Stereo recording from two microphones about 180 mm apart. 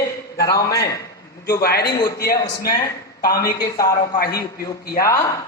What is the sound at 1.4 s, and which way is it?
Speech, 55° left (ahead or behind).